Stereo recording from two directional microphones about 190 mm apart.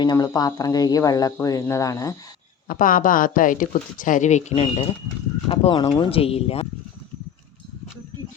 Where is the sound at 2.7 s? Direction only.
45° left (ahead or behind).